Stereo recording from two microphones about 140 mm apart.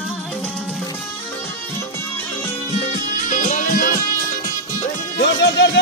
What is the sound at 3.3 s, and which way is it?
Music, 60° left (ahead or behind).